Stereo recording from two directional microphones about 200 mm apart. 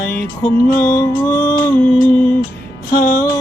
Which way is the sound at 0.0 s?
50° left (ahead or behind).